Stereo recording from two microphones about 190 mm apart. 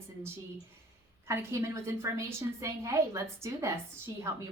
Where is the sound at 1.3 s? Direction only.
15° right (ahead or behind).